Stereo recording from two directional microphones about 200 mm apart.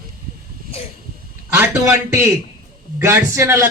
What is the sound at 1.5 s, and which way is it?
A man's voice, 15° right (ahead or behind).